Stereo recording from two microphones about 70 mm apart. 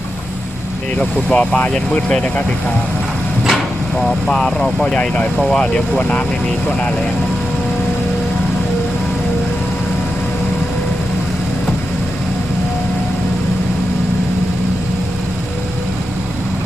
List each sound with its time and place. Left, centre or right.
0.9 s speech: centre
4.0 s speech: centre
4.9 s speech: left